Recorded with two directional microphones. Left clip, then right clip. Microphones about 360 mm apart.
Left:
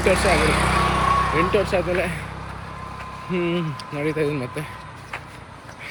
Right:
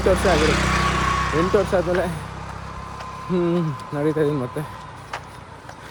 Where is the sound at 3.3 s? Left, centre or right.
Centre.